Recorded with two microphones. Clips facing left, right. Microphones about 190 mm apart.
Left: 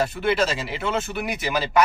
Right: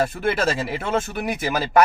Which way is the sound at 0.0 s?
50° right (ahead or behind).